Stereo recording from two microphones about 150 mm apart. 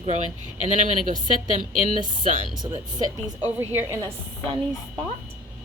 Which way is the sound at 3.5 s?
15° right (ahead or behind).